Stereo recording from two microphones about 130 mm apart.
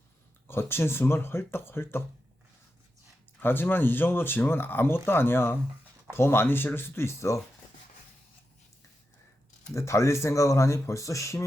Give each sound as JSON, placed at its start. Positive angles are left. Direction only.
{"t": 0.4, "sound": "speech", "side_deg": 20}
{"t": 3.4, "sound": "speech", "side_deg": 15}
{"t": 9.7, "sound": "speech", "side_deg": 20}